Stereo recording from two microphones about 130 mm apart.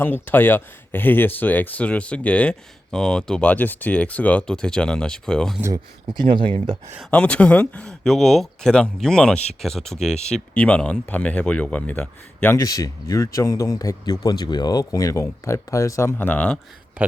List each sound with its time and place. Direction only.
0.0 s speech: 15° left (ahead or behind)
5.7 s speech: 35° right (ahead or behind)
7.1 s speech: 10° left (ahead or behind)
12.5 s speech: 25° left (ahead or behind); by 16.6 s 10° left (ahead or behind)